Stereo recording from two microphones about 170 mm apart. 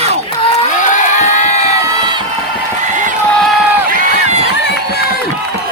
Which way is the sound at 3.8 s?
40° right (ahead or behind).